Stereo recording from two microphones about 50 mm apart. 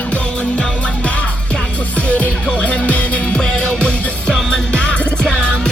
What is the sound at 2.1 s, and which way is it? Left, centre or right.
Music, left.